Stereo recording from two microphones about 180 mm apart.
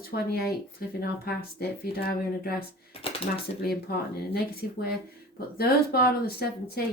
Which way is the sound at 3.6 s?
60° left (ahead or behind).